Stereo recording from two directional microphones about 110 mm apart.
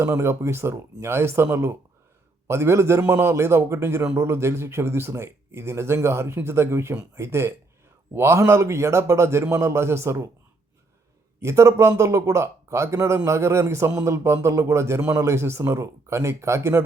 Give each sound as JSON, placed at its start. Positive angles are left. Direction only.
{"t": 0.0, "sound": "speech", "side_deg": -25}
{"t": 11.3, "sound": "speech", "side_deg": -25}